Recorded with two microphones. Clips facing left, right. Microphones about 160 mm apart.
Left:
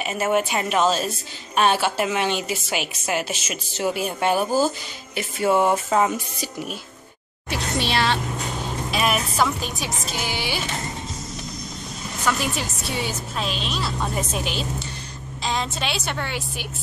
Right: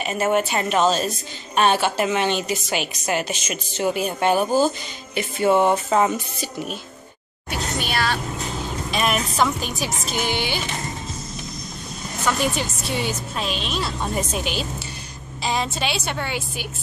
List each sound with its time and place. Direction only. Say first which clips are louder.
0.0 s a woman's voice: right 1 dB; 5° left (ahead or behind)
7.8 s vehicle: left 2 dB; 25° left (ahead or behind)
8.9 s speech: right 1 dB; 5° left (ahead or behind)
12.3 s a woman's voice: right 2 dB; centre (ahead or behind)